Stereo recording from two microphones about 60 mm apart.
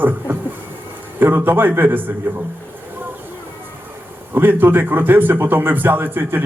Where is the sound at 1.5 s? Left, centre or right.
Right.